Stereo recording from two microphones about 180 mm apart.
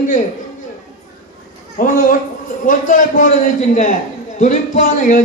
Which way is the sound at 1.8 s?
50° left (ahead or behind).